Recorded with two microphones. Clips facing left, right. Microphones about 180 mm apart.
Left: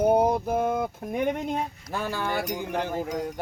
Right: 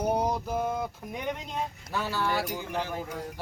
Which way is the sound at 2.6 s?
55° left (ahead or behind).